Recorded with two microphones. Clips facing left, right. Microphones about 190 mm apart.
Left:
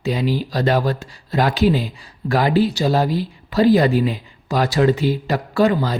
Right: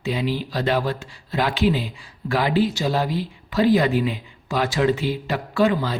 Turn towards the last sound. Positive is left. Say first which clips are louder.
# left 3 dB
turn(degrees=40)  # may be behind; listen again after turning